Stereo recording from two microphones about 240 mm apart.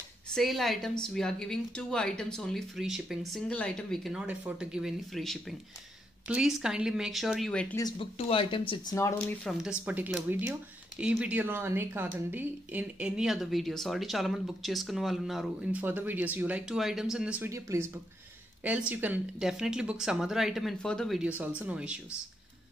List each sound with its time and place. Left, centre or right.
0.3 s speech: centre
7.7 s speech: centre
9.4 s speech: centre